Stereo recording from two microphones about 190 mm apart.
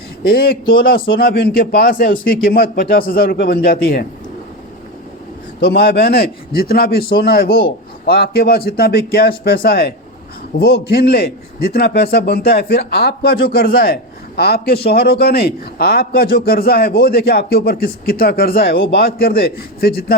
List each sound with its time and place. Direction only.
0.3 s a man's voice: 55° left (ahead or behind)
5.5 s a man's voice: 55° left (ahead or behind)